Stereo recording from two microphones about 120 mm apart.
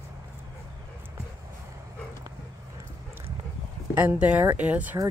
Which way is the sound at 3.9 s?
10° right (ahead or behind).